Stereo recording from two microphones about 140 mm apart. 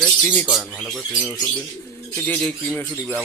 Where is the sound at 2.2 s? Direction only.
10° left (ahead or behind).